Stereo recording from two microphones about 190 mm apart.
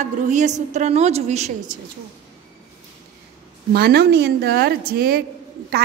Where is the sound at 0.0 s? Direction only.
40° right (ahead or behind).